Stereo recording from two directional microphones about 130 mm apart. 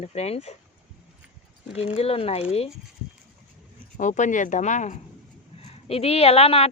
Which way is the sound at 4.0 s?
75° left (ahead or behind).